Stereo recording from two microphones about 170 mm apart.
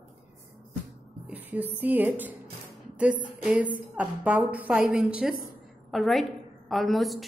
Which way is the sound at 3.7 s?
10° right (ahead or behind).